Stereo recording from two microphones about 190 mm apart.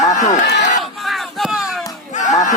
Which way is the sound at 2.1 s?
40° left (ahead or behind).